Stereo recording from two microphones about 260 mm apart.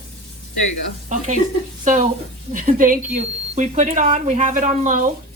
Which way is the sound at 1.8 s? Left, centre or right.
Right.